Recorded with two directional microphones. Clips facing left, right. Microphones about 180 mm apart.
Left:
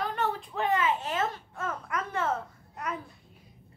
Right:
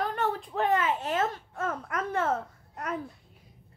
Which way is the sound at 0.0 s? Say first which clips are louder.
Right 1 dB; 50° right (ahead or behind).